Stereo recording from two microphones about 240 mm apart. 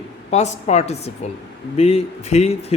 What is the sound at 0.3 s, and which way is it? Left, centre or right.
Speech, left.